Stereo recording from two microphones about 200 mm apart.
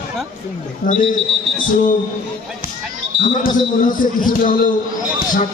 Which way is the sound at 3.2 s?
45° left (ahead or behind).